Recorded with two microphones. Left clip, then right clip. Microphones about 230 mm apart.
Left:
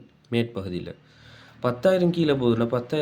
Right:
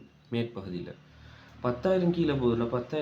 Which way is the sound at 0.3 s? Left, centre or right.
Left.